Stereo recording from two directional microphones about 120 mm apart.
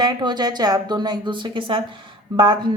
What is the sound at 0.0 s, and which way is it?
A woman's voice, 35° right (ahead or behind).